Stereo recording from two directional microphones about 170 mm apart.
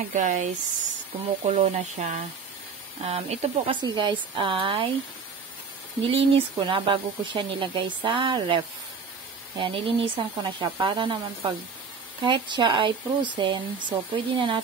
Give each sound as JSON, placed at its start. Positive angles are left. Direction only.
{"t": 0.1, "sound": "speech", "side_deg": -45}
{"t": 3.8, "sound": "speech", "side_deg": -25}
{"t": 6.0, "sound": "speech", "side_deg": -35}